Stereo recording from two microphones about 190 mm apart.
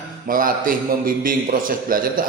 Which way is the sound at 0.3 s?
45° right (ahead or behind).